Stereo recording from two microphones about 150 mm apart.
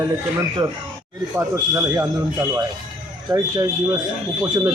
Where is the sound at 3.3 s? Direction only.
25° right (ahead or behind).